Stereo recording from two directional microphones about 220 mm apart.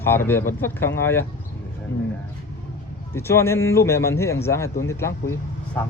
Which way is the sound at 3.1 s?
10° left (ahead or behind).